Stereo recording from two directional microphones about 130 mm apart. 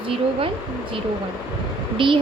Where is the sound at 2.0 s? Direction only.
40° right (ahead or behind).